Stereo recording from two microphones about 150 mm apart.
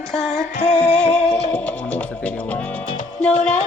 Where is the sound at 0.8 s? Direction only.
5° left (ahead or behind).